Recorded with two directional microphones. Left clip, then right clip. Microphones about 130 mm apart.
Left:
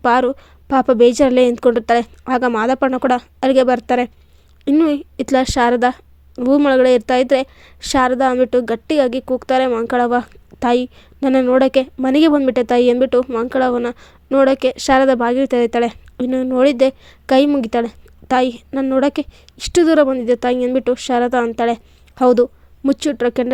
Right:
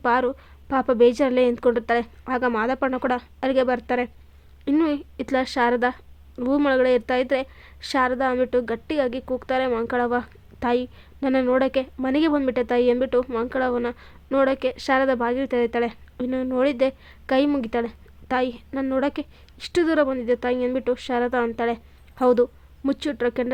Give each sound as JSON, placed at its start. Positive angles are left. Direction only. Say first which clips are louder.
{"t": 0.0, "sound": "a woman's voice", "louder": "left 7 dB", "side_deg": 45}